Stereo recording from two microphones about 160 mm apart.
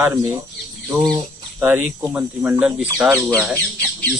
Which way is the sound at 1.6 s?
10° right (ahead or behind).